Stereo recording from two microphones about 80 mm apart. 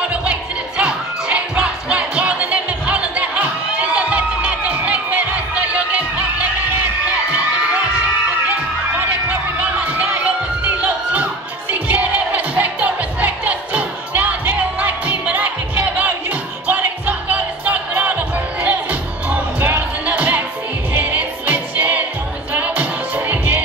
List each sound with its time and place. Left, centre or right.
0.1 s music: centre
8.5 s music: right